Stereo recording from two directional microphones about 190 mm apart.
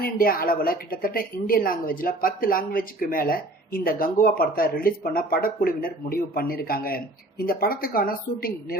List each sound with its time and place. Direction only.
0.0 s a woman's voice: 50° left (ahead or behind)